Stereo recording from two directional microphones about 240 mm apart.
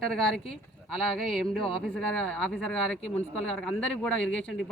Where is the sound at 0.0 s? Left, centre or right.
Centre.